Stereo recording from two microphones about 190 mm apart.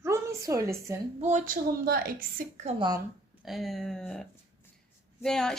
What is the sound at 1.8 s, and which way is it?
Speech, 50° right (ahead or behind).